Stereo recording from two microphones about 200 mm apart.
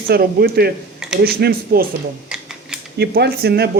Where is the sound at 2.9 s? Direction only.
55° right (ahead or behind).